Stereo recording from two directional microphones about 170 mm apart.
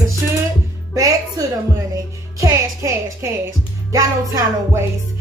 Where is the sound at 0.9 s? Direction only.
20° right (ahead or behind).